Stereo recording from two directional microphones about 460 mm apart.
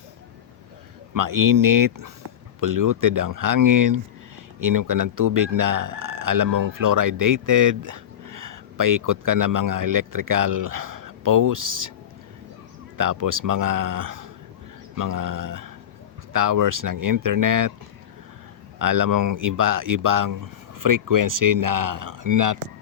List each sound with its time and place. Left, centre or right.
1.1 s speech: right
13.0 s speech: right
18.8 s speech: right